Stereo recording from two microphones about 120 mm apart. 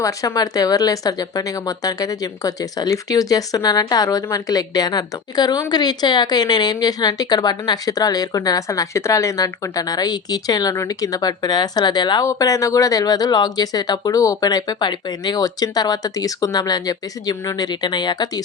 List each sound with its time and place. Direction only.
0.0 s speech: 30° left (ahead or behind)